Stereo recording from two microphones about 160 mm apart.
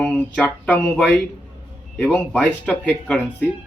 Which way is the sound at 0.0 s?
10° left (ahead or behind).